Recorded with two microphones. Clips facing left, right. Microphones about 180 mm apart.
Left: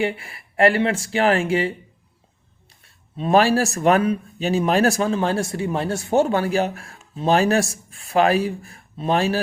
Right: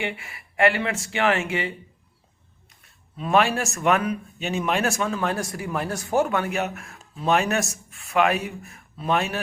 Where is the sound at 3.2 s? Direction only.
35° left (ahead or behind).